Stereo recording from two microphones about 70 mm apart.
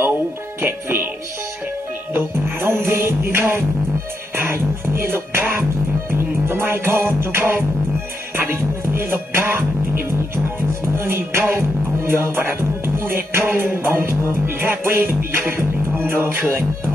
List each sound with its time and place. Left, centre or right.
0.6 s music: right
2.1 s music: right
5.0 s music: right